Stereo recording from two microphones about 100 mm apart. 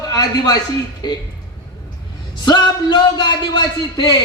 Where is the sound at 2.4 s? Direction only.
45° left (ahead or behind).